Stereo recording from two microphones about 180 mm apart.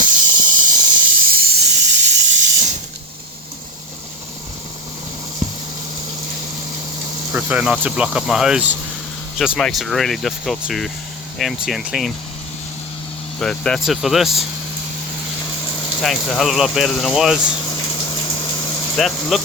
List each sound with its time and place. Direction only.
0.0 s hiss: 45° right (ahead or behind)
0.9 s hiss: 60° right (ahead or behind)
7.3 s speech: 10° right (ahead or behind)
13.4 s speech: 5° left (ahead or behind)
16.0 s speech: centre (ahead or behind)
18.9 s speech: centre (ahead or behind)